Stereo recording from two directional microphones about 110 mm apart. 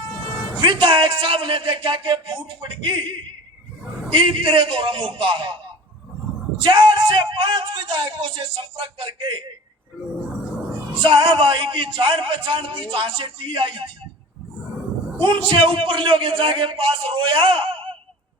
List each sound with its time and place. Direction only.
0.6 s speech: 50° right (ahead or behind)
6.6 s speech: 45° right (ahead or behind)
11.0 s speech: 50° right (ahead or behind)
15.2 s speech: 50° right (ahead or behind)